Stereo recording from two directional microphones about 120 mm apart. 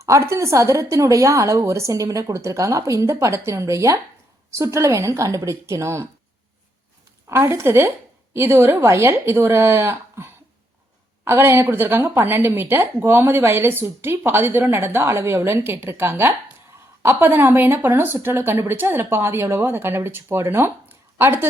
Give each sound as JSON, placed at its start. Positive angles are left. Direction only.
{"t": 0.0, "sound": "speech", "side_deg": -25}
{"t": 7.3, "sound": "speech", "side_deg": -20}